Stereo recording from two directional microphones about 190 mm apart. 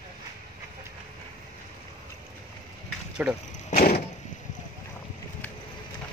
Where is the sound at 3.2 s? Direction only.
5° right (ahead or behind).